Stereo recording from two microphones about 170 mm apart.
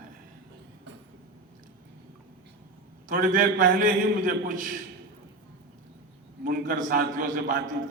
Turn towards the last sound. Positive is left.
turn(degrees=-50)  # may be behind; listen again after turning